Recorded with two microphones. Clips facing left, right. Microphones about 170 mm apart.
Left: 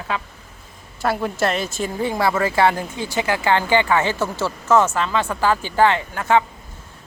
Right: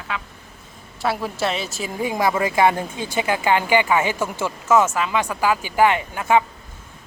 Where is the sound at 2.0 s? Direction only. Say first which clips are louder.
Even; 15° right (ahead or behind).